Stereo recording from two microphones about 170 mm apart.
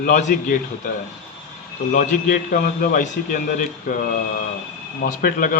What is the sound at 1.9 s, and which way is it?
A man's voice, 55° left (ahead or behind).